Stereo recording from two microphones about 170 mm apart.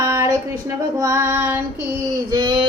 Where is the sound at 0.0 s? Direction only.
20° right (ahead or behind).